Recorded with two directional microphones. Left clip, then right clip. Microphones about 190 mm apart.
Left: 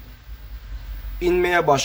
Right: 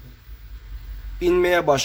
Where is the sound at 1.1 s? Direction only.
25° right (ahead or behind).